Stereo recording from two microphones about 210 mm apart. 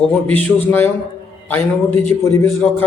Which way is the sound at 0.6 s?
10° left (ahead or behind).